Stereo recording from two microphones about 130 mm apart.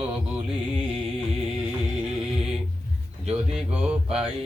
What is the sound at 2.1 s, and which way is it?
Music, 5° right (ahead or behind).